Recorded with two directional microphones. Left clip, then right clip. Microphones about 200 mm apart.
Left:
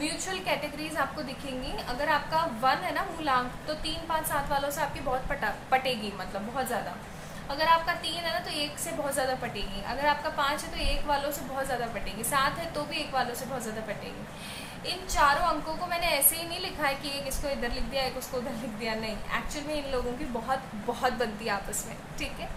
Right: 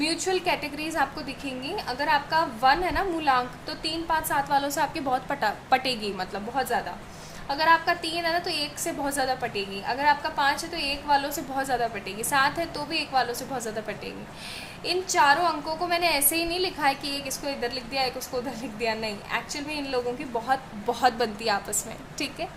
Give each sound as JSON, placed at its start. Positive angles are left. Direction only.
{"t": 0.0, "sound": "a woman's voice", "side_deg": -55}
{"t": 14.8, "sound": "a woman's voice", "side_deg": -55}
{"t": 20.5, "sound": "a woman's voice", "side_deg": -60}